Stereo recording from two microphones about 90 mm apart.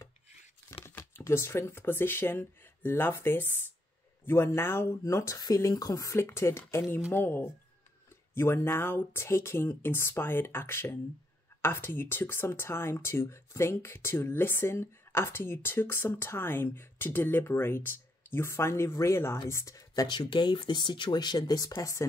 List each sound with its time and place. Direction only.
0.8 s speech: 30° left (ahead or behind)
20.1 s speech: 60° left (ahead or behind)
21.7 s speech: 35° left (ahead or behind)